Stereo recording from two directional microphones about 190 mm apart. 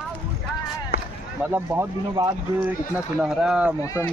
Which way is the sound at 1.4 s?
10° right (ahead or behind).